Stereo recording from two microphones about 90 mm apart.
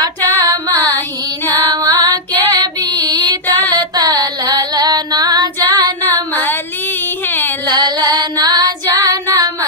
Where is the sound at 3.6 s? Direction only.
50° right (ahead or behind).